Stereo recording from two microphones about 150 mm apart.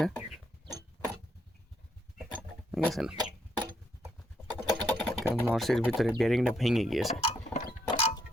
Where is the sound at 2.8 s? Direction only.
Centre (ahead or behind).